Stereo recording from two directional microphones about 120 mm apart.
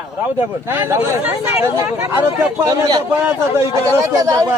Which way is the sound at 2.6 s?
35° right (ahead or behind).